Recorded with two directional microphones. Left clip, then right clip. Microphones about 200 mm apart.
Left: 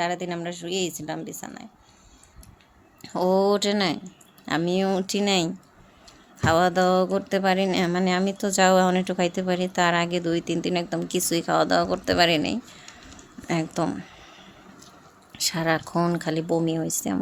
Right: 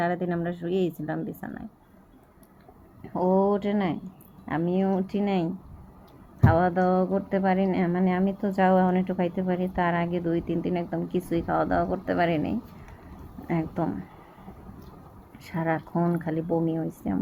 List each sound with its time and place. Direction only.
0.0 s speech: 20° left (ahead or behind)
3.1 s speech: 80° left
3.5 s speech: 55° left (ahead or behind)
15.3 s speech: 60° left (ahead or behind)